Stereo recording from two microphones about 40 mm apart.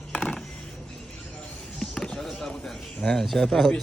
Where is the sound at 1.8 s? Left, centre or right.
Centre.